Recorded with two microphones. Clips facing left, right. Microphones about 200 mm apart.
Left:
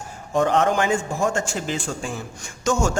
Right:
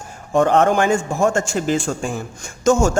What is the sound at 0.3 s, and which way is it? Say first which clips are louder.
A man's voice: right 4 dB; 55° right (ahead or behind).